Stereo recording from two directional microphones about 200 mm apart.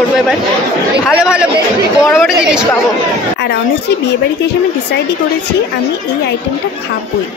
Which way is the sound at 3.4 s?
55° left (ahead or behind).